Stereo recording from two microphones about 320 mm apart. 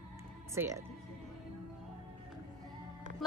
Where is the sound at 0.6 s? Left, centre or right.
Centre.